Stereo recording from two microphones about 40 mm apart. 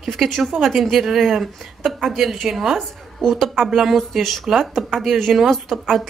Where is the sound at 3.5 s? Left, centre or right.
Centre.